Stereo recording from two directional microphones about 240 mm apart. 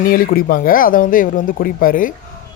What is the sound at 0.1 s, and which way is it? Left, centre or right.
Speech, left.